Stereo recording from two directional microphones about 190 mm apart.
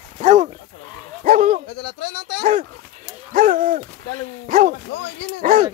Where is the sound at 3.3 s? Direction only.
50° right (ahead or behind).